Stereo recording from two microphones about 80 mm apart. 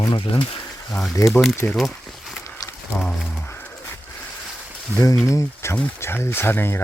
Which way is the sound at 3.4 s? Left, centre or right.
Left.